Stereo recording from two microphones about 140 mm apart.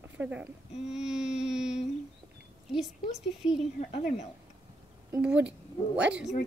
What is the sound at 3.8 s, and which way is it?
Speech, 55° left (ahead or behind).